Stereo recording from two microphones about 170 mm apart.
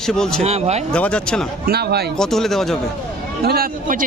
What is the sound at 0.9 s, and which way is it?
Speech, 5° left (ahead or behind).